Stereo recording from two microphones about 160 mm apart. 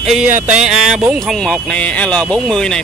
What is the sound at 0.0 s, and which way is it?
Speech, 5° right (ahead or behind).